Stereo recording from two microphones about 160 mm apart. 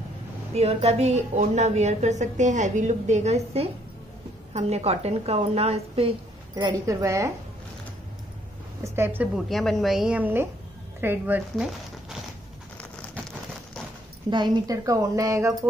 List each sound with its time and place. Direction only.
0.6 s a woman's voice: 40° right (ahead or behind)
6.5 s a woman's voice: 20° right (ahead or behind)
8.8 s a woman's voice: 15° right (ahead or behind)
9.5 s a woman's voice: centre (ahead or behind)
11.5 s crumpling: 5° right (ahead or behind)
14.3 s a woman's voice: 25° right (ahead or behind)